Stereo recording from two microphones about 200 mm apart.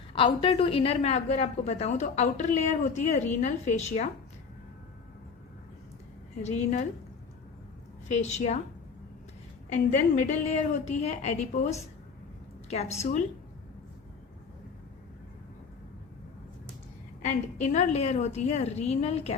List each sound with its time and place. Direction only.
0.1 s a woman's voice: 25° left (ahead or behind)
6.4 s a woman's voice: 35° left (ahead or behind)
8.0 s a woman's voice: 35° left (ahead or behind)
9.9 s a woman's voice: 35° left (ahead or behind)
17.2 s a woman's voice: 35° left (ahead or behind)